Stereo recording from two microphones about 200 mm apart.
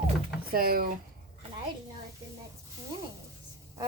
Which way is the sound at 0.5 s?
45° right (ahead or behind).